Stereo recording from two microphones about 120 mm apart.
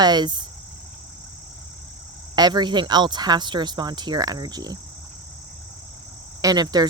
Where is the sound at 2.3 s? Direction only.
35° right (ahead or behind).